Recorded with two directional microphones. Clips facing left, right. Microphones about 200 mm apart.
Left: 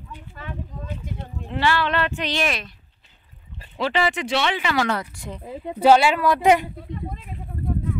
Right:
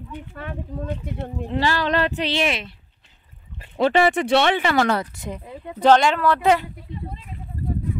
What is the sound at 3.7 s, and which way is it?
Speech, 50° right (ahead or behind).